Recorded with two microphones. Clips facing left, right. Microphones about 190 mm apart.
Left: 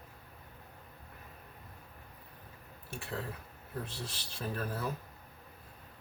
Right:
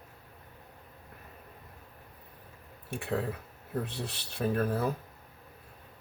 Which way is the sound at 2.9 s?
60° right (ahead or behind).